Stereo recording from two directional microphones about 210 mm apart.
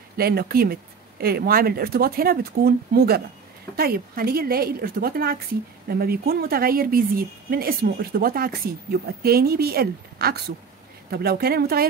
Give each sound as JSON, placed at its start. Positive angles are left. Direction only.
{"t": 0.2, "sound": "speech", "side_deg": -45}